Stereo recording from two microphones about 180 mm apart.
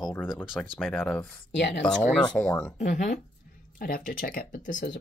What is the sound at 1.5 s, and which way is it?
Speech, 75° left (ahead or behind).